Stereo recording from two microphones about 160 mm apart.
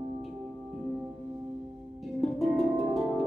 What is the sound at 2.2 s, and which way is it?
Music, centre (ahead or behind).